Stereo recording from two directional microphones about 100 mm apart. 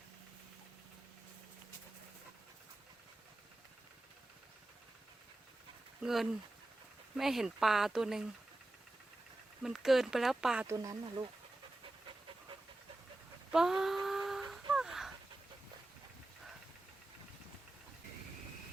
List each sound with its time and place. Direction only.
6.0 s speech: 5° right (ahead or behind)
9.6 s speech: 5° right (ahead or behind)
10.7 s speech: 35° right (ahead or behind)
13.5 s a sound: 5° right (ahead or behind)